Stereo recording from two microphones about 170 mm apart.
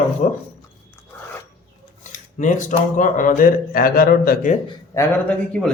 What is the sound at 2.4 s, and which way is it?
A man's voice, 45° left (ahead or behind).